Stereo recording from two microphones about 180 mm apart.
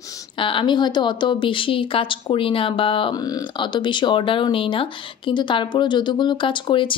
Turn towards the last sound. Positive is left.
turn(degrees=25)  # may be behind; listen again after turning